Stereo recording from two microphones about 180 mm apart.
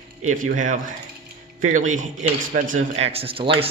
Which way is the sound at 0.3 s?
45° right (ahead or behind).